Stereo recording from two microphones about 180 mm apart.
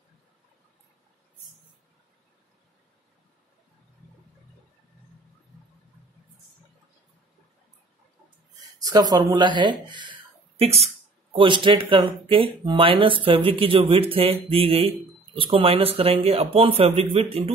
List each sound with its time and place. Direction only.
8.7 s a man's voice: 20° right (ahead or behind)